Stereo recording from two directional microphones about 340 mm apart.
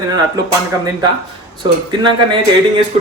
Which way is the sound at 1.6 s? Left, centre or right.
Centre.